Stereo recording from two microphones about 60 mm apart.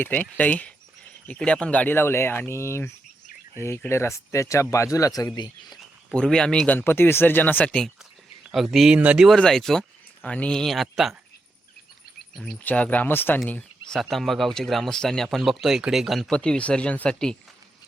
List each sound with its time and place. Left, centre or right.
0.0 s speech: left
1.9 s speech: left
6.1 s speech: centre
6.7 s speech: left
8.5 s speech: centre
8.9 s speech: right
9.3 s speech: centre
10.2 s speech: centre
10.6 s speech: centre
12.6 s speech: left
14.0 s speech: centre
15.4 s speech: centre
16.3 s speech: centre